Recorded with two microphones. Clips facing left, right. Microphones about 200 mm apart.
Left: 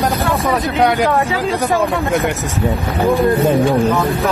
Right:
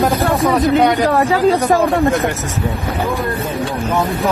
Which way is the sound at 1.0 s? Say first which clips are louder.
Right 3 dB; 40° right (ahead or behind).